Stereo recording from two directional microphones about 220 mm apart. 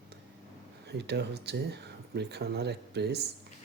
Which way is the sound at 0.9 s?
50° right (ahead or behind).